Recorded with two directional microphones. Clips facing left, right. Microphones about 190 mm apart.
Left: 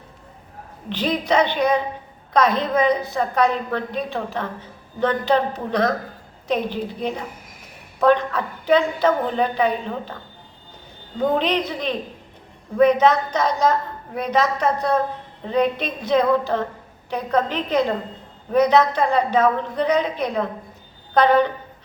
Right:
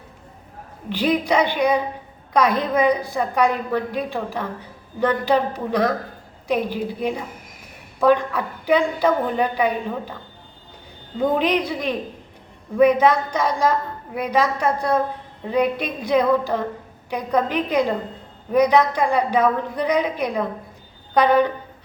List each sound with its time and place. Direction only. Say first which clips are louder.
0.9 s a woman's voice: right 2 dB; 10° right (ahead or behind)
11.2 s a woman's voice: right 1 dB; 10° right (ahead or behind)